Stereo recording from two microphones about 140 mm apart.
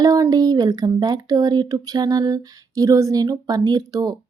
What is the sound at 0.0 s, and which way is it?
Speech, 25° right (ahead or behind).